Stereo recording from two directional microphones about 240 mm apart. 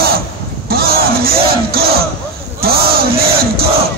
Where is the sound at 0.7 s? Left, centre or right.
Right.